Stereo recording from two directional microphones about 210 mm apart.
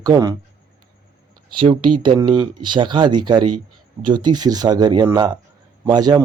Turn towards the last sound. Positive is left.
turn(degrees=-20)  # may be behind; listen again after turning